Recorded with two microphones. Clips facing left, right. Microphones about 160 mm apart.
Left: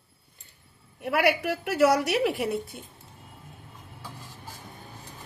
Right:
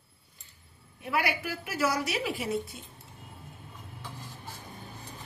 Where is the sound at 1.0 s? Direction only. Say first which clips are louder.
Left 7 dB; 70° left (ahead or behind).